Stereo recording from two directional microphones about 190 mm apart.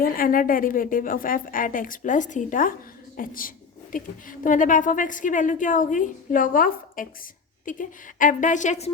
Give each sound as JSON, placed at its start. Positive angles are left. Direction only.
{"t": 0.0, "sound": "a woman's voice", "side_deg": 45}